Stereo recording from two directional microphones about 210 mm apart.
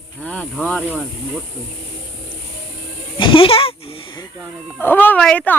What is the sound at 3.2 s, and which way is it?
A woman's voice, 25° left (ahead or behind).